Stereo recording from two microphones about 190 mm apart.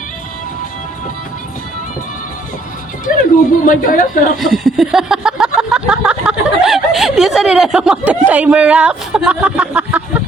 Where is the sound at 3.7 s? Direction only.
45° left (ahead or behind).